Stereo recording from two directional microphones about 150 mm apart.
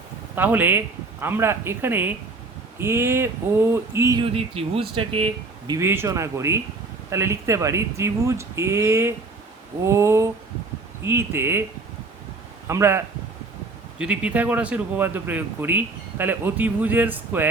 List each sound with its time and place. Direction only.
0.3 s speech: 10° right (ahead or behind)
4.2 s speech: 40° right (ahead or behind)
5.8 s speech: 15° right (ahead or behind)
12.6 s a man's voice: 15° right (ahead or behind)
14.0 s speech: 10° right (ahead or behind)